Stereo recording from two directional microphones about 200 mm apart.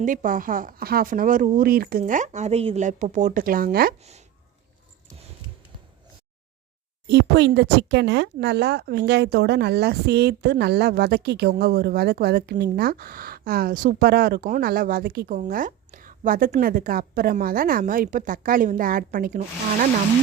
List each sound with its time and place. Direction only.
0.0 s speech: 40° right (ahead or behind)
7.1 s speech: 55° right (ahead or behind)